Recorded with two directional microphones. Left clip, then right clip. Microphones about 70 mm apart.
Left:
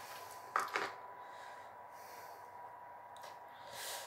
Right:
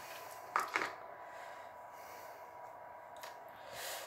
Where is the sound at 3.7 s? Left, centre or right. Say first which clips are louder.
Right 1 dB; centre.